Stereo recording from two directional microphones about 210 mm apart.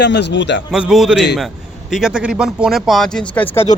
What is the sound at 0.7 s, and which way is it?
Speech, centre (ahead or behind).